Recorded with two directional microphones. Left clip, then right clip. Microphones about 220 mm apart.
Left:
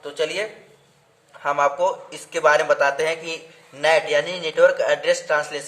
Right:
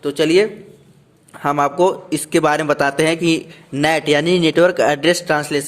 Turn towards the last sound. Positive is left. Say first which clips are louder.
# right 4 dB
turn(degrees=-45)  # may be behind; listen again after turning